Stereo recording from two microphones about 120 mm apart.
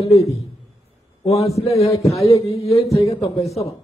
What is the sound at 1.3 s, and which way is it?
Speech, 25° left (ahead or behind).